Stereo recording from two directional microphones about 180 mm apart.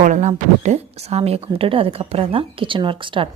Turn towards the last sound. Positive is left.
turn(degrees=-30)  # may be behind; listen again after turning